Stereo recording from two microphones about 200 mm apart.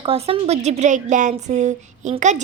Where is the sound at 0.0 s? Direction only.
30° right (ahead or behind).